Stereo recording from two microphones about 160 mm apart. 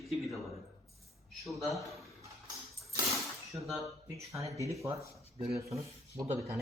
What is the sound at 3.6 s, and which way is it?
Speech, centre (ahead or behind).